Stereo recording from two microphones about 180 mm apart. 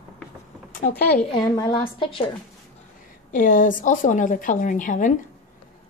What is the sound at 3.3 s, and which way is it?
Speech, 50° left (ahead or behind).